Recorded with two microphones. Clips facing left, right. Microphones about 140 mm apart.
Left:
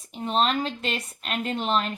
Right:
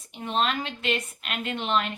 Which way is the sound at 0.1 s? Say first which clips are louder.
Left 3 dB; 30° left (ahead or behind).